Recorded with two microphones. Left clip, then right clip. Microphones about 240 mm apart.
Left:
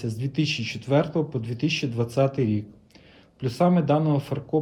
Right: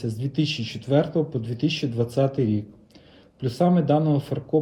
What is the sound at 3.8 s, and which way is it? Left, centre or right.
Speech, left.